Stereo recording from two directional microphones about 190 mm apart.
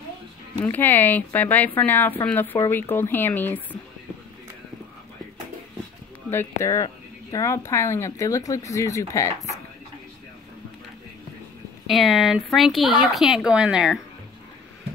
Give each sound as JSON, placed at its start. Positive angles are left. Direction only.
{"t": 0.6, "sound": "speech", "side_deg": 10}
{"t": 6.3, "sound": "speech", "side_deg": 15}
{"t": 11.9, "sound": "speech", "side_deg": 0}